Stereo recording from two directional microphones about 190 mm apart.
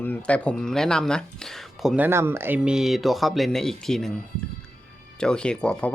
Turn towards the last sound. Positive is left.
turn(degrees=5)  # may be behind; listen again after turning